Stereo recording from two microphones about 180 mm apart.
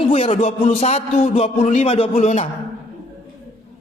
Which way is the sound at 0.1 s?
35° left (ahead or behind).